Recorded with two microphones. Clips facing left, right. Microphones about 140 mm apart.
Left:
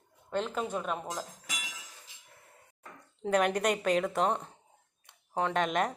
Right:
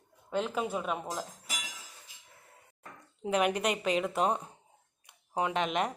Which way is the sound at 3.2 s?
10° right (ahead or behind).